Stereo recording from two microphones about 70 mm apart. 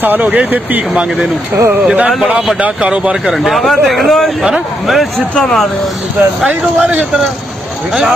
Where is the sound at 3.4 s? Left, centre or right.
Centre.